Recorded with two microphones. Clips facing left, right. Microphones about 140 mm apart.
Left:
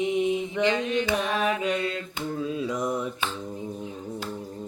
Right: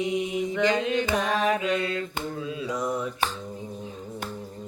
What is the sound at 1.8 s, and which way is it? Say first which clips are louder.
Mantra: right 1 dB; 30° left (ahead or behind).